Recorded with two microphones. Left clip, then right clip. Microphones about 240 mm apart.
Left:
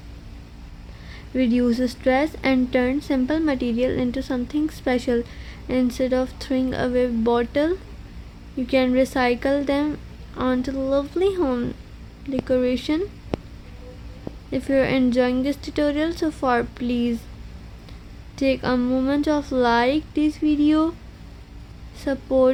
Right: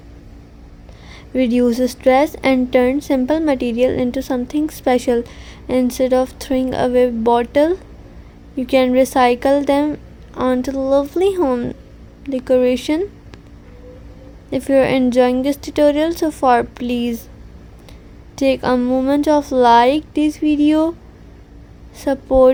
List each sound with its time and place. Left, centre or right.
1.1 s a woman's voice: right
14.5 s a woman's voice: right
18.3 s a woman's voice: right
21.9 s a woman's voice: right